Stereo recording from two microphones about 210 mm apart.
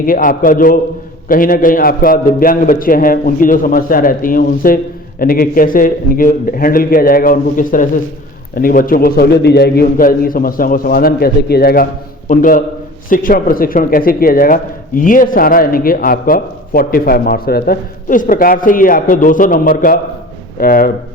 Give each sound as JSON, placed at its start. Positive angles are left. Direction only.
{"t": 0.0, "sound": "a man's voice", "side_deg": 40}